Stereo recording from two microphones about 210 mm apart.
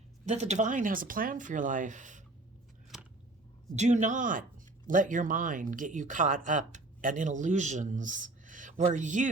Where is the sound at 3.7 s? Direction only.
35° right (ahead or behind).